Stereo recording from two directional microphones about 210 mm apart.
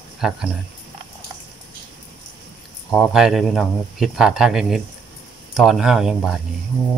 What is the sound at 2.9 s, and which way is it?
Speech, centre (ahead or behind).